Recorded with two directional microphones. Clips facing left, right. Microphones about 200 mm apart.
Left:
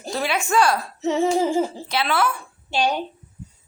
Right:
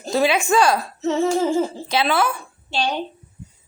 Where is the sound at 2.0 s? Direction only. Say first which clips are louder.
Right 2 dB; 15° right (ahead or behind).